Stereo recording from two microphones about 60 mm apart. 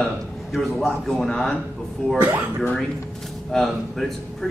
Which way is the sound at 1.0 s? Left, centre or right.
Centre.